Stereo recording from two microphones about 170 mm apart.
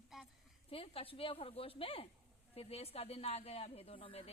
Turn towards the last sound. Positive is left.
turn(degrees=35)  # may be behind; listen again after turning